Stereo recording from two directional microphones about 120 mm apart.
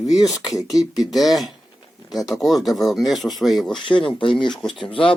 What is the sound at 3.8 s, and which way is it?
Speech, 45° left (ahead or behind).